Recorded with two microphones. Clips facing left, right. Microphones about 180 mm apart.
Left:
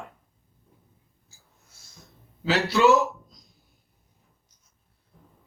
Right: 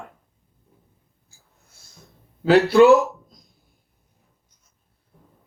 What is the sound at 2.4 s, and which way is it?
Speech, 55° right (ahead or behind).